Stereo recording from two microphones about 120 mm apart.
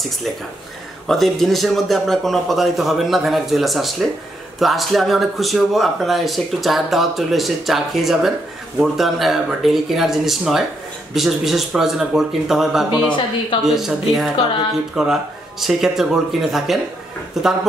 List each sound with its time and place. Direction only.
1.0 s speech: centre (ahead or behind)